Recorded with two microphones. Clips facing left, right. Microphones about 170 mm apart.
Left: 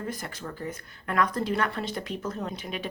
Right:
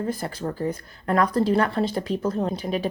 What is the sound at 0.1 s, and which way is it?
Speech, 30° right (ahead or behind).